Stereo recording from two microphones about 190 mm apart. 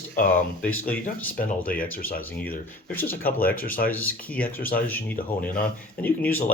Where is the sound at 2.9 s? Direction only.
10° left (ahead or behind).